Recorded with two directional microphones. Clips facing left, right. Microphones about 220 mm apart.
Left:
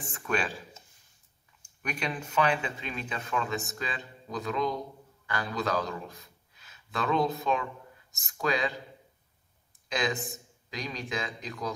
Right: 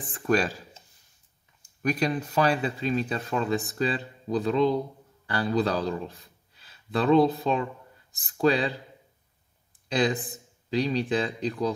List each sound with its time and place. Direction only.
0.1 s speech: 35° right (ahead or behind)
1.8 s a man's voice: 40° right (ahead or behind)
9.8 s speech: 35° right (ahead or behind)